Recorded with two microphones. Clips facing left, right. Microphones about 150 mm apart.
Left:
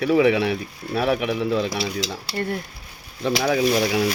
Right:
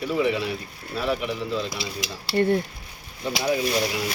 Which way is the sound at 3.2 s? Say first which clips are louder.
Left 4 dB; 80° left.